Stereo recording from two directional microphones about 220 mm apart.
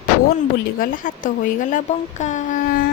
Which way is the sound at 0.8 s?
40° left (ahead or behind).